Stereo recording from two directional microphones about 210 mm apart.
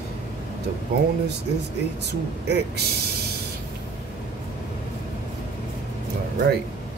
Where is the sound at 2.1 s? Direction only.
55° right (ahead or behind).